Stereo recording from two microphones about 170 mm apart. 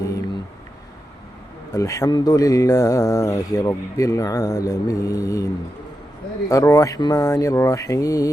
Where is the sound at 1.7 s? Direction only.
20° left (ahead or behind).